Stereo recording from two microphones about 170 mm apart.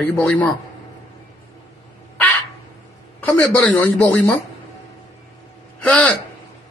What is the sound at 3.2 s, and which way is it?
A man's voice, 10° left (ahead or behind).